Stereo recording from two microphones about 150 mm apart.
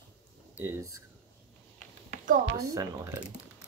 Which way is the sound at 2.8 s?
20° right (ahead or behind).